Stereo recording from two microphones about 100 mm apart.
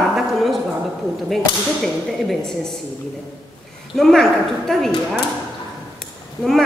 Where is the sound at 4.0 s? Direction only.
5° left (ahead or behind).